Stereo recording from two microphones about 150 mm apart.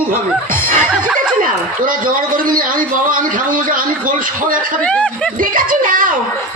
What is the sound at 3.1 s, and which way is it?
Speech, 65° right (ahead or behind).